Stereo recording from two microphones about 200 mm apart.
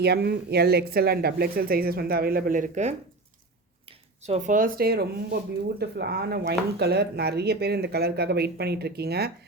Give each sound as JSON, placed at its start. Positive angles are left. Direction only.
{"t": 0.0, "sound": "speech", "side_deg": -55}